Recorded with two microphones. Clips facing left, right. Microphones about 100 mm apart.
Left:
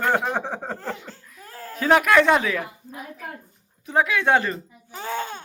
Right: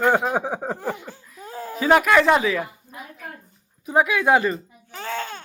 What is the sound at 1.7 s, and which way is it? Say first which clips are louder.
Speech: right 1 dB; 5° right (ahead or behind).